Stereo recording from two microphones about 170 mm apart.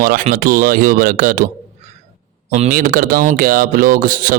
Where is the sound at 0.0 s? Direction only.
55° right (ahead or behind).